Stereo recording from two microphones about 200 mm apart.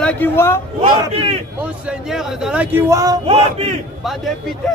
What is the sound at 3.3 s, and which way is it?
Speech, 30° right (ahead or behind).